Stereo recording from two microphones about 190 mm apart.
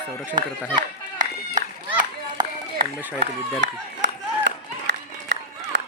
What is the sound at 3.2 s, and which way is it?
Run, 70° right (ahead or behind).